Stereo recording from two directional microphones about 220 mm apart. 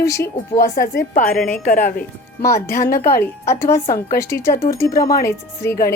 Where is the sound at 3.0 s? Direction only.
45° left (ahead or behind).